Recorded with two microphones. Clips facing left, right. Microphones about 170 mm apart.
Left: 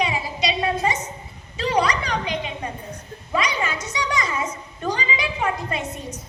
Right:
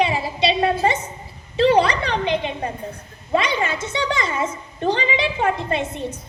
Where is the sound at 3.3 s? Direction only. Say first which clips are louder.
Right 4 dB; 30° right (ahead or behind).